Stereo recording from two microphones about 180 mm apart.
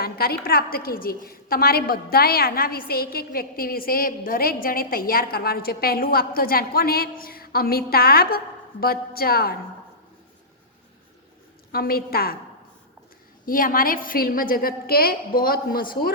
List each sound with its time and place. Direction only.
0.0 s a woman's voice: 60° left (ahead or behind)
11.7 s a woman's voice: 55° left (ahead or behind)
13.4 s a woman's voice: 50° left (ahead or behind)